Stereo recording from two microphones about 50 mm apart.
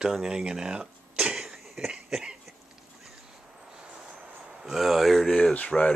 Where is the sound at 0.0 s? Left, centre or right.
Centre.